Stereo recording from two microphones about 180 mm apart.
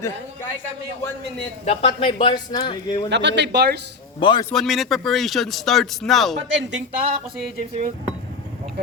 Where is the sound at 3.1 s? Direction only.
75° right (ahead or behind).